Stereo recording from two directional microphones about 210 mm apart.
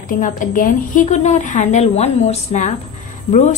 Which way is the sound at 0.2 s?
40° left (ahead or behind).